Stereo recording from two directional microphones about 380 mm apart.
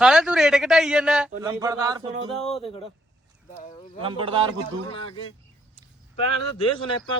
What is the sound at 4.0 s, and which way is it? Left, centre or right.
Speech, centre.